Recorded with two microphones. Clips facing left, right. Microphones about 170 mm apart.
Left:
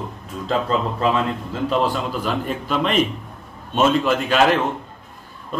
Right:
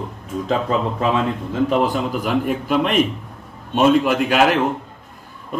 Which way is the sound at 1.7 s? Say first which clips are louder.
Left 1 dB; 15° right (ahead or behind).